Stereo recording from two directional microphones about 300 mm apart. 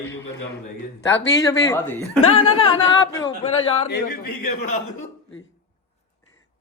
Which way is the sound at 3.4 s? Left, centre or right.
Centre.